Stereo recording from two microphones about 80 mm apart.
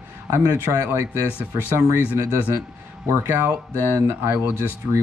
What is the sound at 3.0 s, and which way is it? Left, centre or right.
Speech, right.